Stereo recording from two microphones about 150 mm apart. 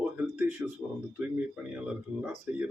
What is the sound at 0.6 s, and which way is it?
Speech, 10° right (ahead or behind).